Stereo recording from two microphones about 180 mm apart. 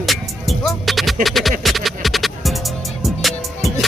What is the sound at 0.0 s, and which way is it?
Music, centre (ahead or behind).